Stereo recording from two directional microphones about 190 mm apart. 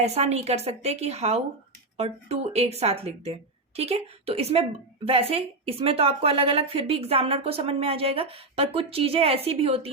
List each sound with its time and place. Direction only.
0.0 s a woman's voice: 35° right (ahead or behind)